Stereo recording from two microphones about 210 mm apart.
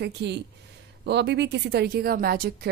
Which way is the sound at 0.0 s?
55° right (ahead or behind).